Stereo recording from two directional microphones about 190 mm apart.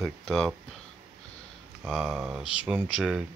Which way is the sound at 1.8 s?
5° right (ahead or behind).